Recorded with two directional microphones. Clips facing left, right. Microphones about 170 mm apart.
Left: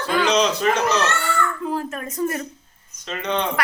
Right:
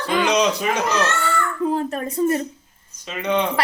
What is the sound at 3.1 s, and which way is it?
Speech, 10° right (ahead or behind).